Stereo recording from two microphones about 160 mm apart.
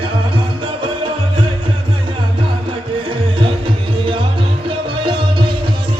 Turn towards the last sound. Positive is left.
turn(degrees=-30)  # may be behind; listen again after turning